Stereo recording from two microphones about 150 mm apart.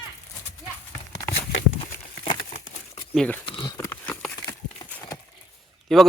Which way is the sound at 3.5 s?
35° left (ahead or behind).